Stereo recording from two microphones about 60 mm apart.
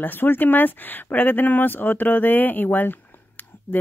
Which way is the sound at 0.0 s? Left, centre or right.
Left.